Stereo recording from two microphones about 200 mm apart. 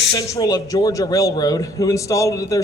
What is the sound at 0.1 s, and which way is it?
A man's voice, 15° left (ahead or behind).